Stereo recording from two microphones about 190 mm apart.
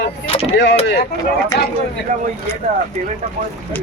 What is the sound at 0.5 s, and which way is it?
Speech, 65° left (ahead or behind).